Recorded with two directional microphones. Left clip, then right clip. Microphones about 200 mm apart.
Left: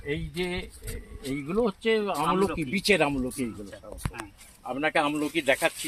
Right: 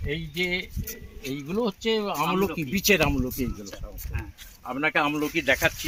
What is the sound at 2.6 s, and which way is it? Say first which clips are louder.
Speech: right 1 dB; 40° right (ahead or behind).